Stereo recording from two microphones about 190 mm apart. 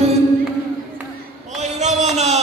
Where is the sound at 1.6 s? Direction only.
40° right (ahead or behind).